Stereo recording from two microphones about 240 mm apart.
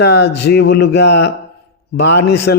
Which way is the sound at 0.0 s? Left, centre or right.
Left.